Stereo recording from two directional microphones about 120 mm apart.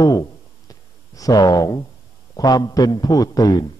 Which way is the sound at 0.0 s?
30° left (ahead or behind).